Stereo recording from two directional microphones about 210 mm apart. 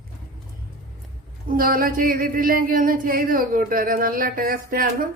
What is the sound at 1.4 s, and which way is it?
Speech, 40° right (ahead or behind).